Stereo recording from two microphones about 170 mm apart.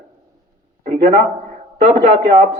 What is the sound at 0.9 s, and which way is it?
A man's voice, 45° right (ahead or behind).